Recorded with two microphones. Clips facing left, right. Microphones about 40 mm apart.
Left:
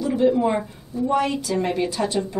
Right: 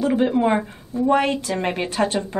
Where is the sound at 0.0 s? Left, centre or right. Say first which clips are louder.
Even; right.